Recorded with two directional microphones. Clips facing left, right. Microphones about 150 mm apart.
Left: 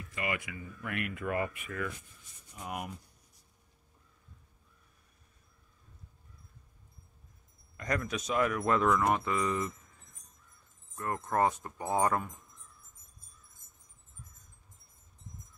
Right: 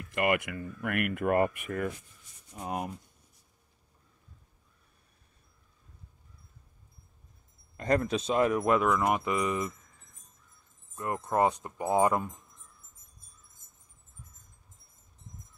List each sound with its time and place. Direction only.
0.0 s speech: 65° right (ahead or behind)
2.5 s speech: 30° right (ahead or behind)
7.7 s a man's voice: 30° right (ahead or behind); by 9.7 s 15° right (ahead or behind)
11.0 s speech: 15° right (ahead or behind)